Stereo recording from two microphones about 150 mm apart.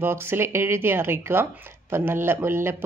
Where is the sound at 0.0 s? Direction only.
15° right (ahead or behind).